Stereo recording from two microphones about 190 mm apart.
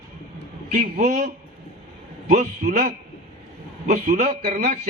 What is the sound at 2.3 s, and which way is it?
A man's voice, 40° right (ahead or behind).